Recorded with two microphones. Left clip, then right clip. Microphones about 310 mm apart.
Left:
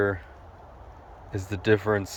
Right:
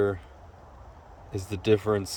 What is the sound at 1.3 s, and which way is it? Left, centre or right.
Speech, centre.